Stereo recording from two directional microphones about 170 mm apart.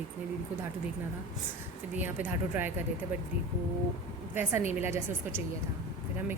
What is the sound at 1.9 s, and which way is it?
Speech, 10° right (ahead or behind).